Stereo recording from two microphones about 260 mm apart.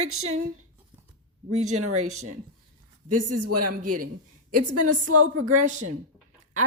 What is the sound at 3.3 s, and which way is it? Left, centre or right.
Speech, right.